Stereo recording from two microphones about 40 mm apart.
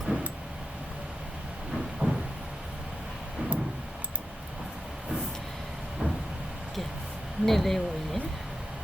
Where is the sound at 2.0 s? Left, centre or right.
Right.